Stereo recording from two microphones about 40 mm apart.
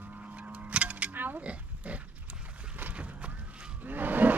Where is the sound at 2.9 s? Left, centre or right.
Right.